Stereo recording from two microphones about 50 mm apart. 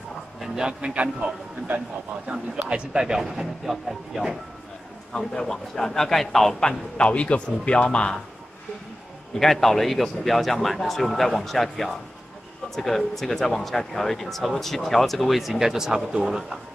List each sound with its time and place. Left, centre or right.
0.4 s a man's voice: centre
2.3 s speech: centre
5.1 s a man's voice: centre
7.0 s speech: left
9.4 s speech: centre